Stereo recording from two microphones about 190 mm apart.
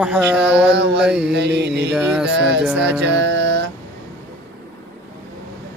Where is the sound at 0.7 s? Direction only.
65° right (ahead or behind).